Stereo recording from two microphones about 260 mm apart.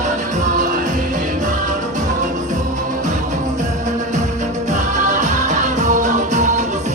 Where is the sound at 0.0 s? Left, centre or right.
Right.